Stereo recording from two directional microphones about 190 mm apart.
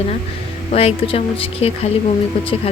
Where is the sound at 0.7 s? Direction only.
30° left (ahead or behind).